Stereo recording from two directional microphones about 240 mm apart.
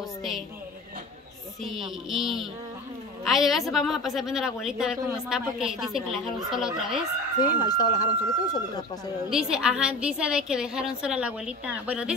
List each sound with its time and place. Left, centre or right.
2.0 s a woman's voice: centre
7.5 s speech: centre
9.3 s a woman's voice: centre